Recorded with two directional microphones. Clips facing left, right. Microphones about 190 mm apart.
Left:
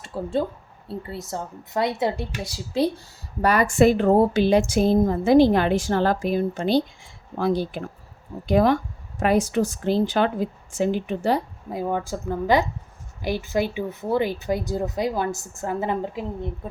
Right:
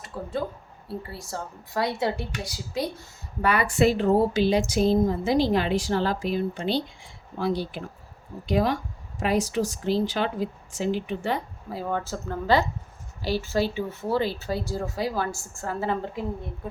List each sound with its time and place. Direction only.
0.0 s a woman's voice: 30° left (ahead or behind)
3.4 s a woman's voice: 40° left (ahead or behind)
11.7 s speech: 15° left (ahead or behind)